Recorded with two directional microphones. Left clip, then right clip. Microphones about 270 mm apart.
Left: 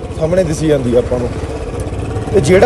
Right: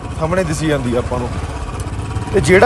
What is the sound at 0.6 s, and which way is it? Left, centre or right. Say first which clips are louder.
Speech: left 5 dB; centre.